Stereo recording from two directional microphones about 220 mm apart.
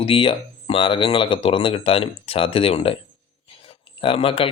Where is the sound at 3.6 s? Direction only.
25° left (ahead or behind).